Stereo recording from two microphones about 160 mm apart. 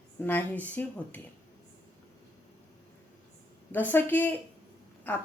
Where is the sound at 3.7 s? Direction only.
10° left (ahead or behind).